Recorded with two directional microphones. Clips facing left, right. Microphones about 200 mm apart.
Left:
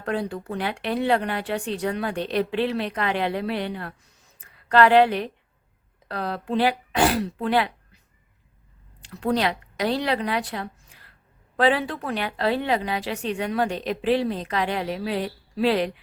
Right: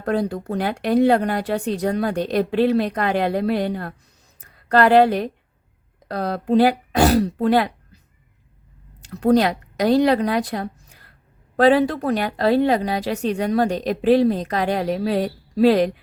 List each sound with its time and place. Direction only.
0.0 s a woman's voice: 40° right (ahead or behind)
9.0 s a woman's voice: 45° right (ahead or behind)